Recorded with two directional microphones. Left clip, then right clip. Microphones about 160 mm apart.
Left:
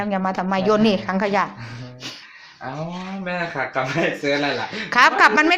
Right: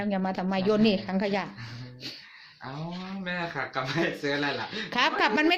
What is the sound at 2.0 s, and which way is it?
Music, 30° right (ahead or behind).